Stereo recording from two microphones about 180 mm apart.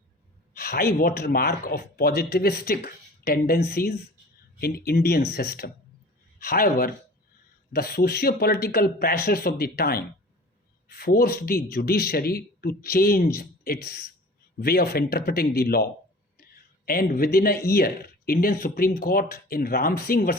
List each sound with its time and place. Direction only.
0.5 s speech: 55° left (ahead or behind)